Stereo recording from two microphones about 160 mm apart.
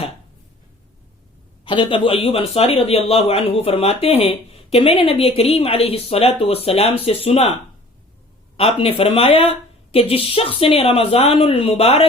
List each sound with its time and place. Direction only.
1.6 s speech: 30° left (ahead or behind)
8.5 s speech: 35° left (ahead or behind)